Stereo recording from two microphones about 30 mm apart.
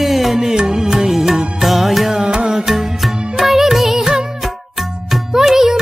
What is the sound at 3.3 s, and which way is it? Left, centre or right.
Music, centre.